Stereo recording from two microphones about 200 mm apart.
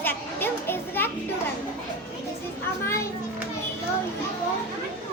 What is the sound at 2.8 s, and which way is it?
Speech, 15° left (ahead or behind).